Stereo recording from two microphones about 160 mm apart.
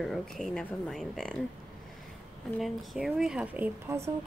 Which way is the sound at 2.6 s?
Centre (ahead or behind).